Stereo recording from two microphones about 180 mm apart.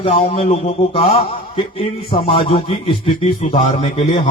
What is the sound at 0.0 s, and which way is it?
Speech, 30° left (ahead or behind).